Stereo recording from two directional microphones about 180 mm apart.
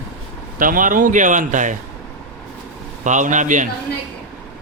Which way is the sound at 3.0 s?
45° right (ahead or behind).